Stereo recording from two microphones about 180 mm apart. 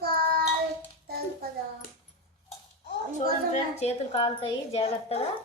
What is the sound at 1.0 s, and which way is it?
Music, 60° right (ahead or behind).